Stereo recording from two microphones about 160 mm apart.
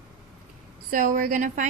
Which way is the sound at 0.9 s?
60° right (ahead or behind).